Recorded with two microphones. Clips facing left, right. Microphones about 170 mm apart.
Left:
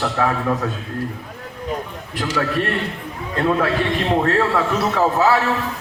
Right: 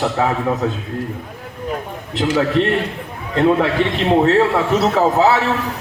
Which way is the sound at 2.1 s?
25° right (ahead or behind).